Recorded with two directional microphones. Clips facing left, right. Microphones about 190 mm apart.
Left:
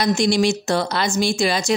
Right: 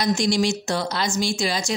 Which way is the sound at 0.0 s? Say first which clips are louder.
Left 3 dB; 65° left (ahead or behind).